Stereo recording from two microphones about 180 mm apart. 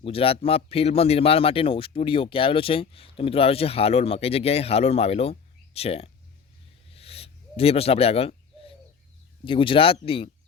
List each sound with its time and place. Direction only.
0.0 s speech: 30° left (ahead or behind)
6.9 s a sound: 35° left (ahead or behind)
9.4 s speech: 30° left (ahead or behind)